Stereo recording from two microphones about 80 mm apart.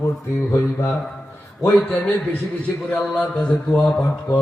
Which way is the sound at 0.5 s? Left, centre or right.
Left.